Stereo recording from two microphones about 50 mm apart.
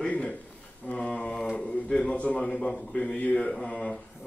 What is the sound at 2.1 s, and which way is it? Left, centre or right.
Speech, left.